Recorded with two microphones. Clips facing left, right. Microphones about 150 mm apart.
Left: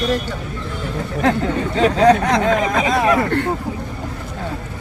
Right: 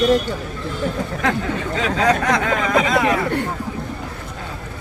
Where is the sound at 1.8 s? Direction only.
35° left (ahead or behind).